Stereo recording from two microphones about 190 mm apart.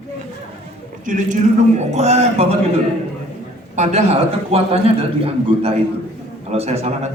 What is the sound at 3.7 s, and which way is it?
A man's voice, 35° right (ahead or behind).